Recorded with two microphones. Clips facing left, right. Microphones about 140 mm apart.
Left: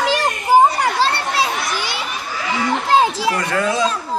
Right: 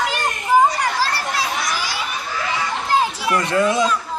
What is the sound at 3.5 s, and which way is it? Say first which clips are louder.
Speech: right 1 dB; 20° right (ahead or behind).